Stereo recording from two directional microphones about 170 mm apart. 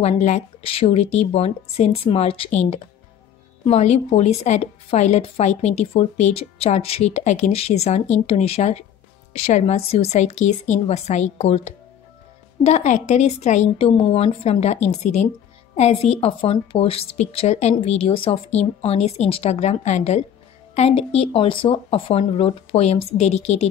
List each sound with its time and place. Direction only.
0.0 s a woman's voice: 40° left (ahead or behind)